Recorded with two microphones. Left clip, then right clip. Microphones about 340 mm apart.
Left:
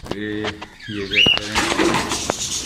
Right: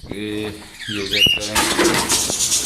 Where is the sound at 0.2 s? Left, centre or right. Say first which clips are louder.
Right 3 dB; centre.